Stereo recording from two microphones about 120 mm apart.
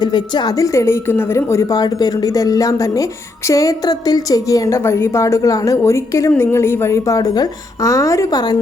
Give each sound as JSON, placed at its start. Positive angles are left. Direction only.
{"t": 0.0, "sound": "speech", "side_deg": 35}